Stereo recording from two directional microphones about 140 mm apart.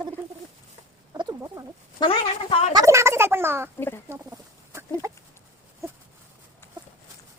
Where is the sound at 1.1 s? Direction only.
25° right (ahead or behind).